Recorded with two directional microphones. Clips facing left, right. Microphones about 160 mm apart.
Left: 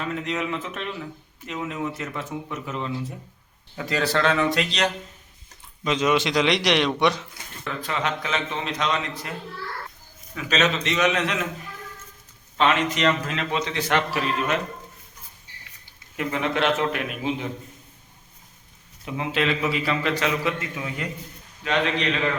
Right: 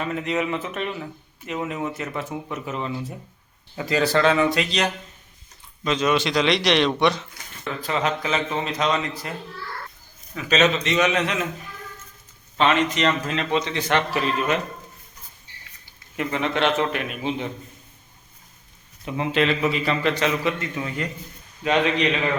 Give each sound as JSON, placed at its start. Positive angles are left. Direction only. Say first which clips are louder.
{"t": 0.0, "sound": "a man's voice", "louder": "right 3 dB", "side_deg": -5}
{"t": 5.8, "sound": "a man's voice", "louder": "even", "side_deg": 15}
{"t": 7.8, "sound": "a man's voice", "louder": "right 3 dB", "side_deg": 0}
{"t": 10.3, "sound": "a man's voice", "louder": "right 3 dB", "side_deg": 0}
{"t": 12.5, "sound": "a man's voice", "louder": "right 1 dB", "side_deg": 5}
{"t": 16.1, "sound": "a man's voice", "louder": "right 1 dB", "side_deg": 0}
{"t": 19.0, "sound": "a man's voice", "louder": "right 3 dB", "side_deg": 0}
{"t": 21.6, "sound": "a man's voice", "louder": "right 3 dB", "side_deg": -15}